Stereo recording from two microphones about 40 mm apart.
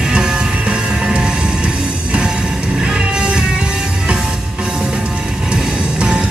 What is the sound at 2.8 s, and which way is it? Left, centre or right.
Music, right.